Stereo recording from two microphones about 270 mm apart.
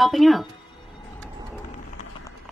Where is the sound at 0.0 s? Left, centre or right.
Centre.